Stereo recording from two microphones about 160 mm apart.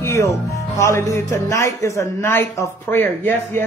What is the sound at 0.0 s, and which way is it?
A man's voice, 15° left (ahead or behind).